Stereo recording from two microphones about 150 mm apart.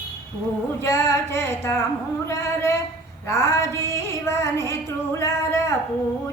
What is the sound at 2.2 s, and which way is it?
Speech, 20° left (ahead or behind).